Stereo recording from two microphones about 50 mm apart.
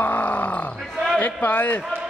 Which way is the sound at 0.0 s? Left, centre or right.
Left.